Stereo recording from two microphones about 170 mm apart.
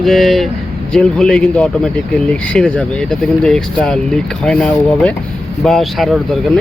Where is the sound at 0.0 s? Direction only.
Centre (ahead or behind).